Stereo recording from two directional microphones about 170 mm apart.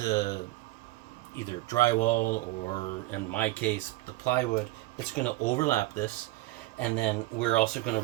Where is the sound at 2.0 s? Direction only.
50° left (ahead or behind).